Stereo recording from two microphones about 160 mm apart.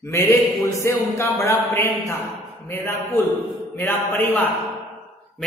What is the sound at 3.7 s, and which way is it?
Speech, 15° left (ahead or behind).